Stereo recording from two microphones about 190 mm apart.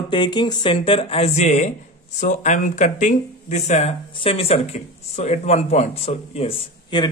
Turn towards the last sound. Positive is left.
turn(degrees=25)  # may be behind; listen again after turning